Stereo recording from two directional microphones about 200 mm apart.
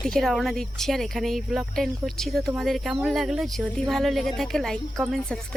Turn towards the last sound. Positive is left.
turn(degrees=0)  # may be behind; listen again after turning